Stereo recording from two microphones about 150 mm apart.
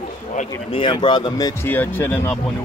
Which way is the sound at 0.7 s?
35° left (ahead or behind).